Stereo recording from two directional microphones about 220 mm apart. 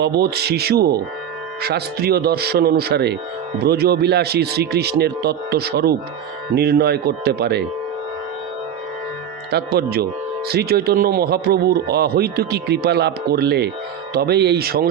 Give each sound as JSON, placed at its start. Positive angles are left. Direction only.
{"t": 0.0, "sound": "speech", "side_deg": -45}
{"t": 9.5, "sound": "speech", "side_deg": -45}